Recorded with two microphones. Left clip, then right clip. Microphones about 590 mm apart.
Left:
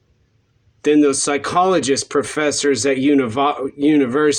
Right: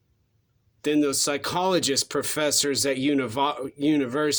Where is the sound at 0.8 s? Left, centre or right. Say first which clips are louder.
Left 9 dB; right.